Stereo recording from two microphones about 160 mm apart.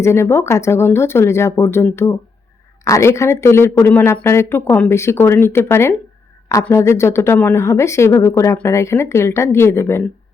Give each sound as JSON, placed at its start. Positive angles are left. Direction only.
{"t": 0.0, "sound": "a woman's voice", "side_deg": 15}